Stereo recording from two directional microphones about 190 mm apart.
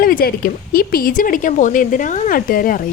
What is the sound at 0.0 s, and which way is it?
Speech, 50° left (ahead or behind).